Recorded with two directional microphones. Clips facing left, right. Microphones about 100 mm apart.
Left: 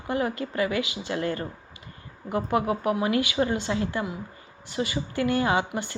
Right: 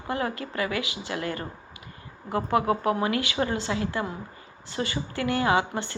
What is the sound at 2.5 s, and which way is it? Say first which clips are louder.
A woman's voice: right 1 dB; 25° left (ahead or behind).